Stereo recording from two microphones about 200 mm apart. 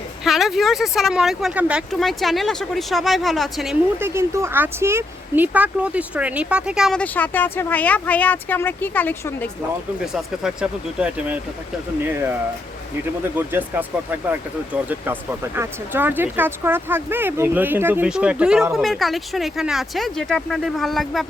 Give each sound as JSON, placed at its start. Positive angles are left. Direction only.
{"t": 0.3, "sound": "speech", "side_deg": 0}
{"t": 4.0, "sound": "speech", "side_deg": -15}
{"t": 10.1, "sound": "speech", "side_deg": -5}